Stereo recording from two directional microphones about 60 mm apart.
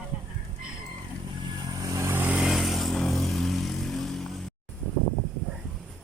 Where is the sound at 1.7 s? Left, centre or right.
Right.